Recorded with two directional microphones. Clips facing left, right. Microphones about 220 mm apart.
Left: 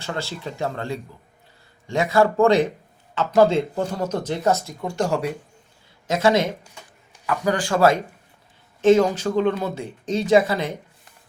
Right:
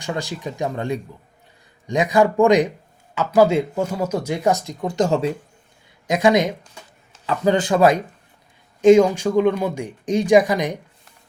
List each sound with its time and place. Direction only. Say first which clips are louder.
0.0 s speech: right 3 dB; 15° right (ahead or behind)